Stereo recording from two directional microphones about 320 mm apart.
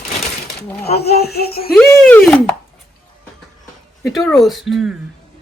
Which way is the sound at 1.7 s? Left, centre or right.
Centre.